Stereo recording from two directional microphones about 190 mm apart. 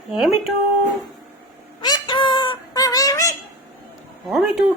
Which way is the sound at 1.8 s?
20° left (ahead or behind).